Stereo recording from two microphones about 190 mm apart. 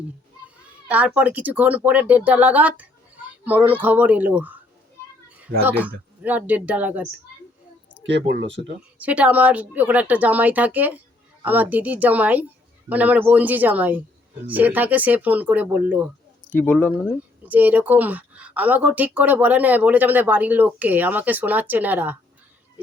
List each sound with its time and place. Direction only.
0.9 s speech: 10° right (ahead or behind)
5.6 s speech: 10° right (ahead or behind)
8.0 s speech: 65° right (ahead or behind)
9.0 s speech: 5° right (ahead or behind)
16.5 s speech: 10° left (ahead or behind)
16.9 s speech: 10° right (ahead or behind)